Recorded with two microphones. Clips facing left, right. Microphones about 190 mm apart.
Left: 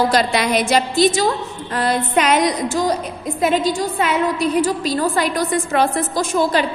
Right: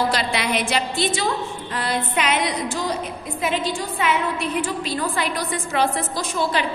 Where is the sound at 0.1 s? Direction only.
45° left (ahead or behind).